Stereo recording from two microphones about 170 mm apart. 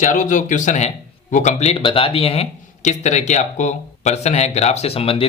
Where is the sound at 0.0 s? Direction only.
50° left (ahead or behind).